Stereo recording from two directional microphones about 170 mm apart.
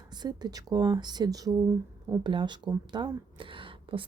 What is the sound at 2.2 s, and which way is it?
Speech, 30° right (ahead or behind).